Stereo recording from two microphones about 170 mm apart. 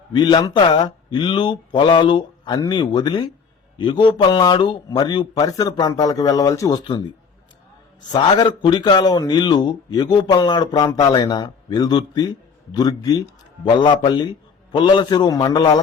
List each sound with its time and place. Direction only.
0.1 s a man's voice: 25° left (ahead or behind)
8.1 s a man's voice: 25° left (ahead or behind)